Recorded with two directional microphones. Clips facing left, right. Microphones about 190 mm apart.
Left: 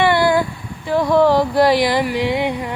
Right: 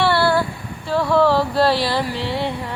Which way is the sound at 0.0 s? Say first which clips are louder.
Left 2 dB; 15° left (ahead or behind).